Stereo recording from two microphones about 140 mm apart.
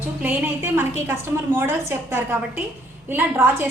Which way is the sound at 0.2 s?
15° right (ahead or behind).